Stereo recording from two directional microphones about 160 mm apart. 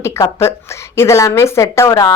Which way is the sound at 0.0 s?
15° left (ahead or behind).